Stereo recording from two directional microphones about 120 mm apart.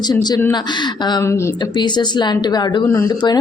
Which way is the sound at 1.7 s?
40° left (ahead or behind).